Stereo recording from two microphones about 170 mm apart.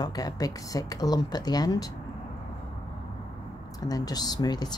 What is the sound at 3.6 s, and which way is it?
Speech, 20° left (ahead or behind).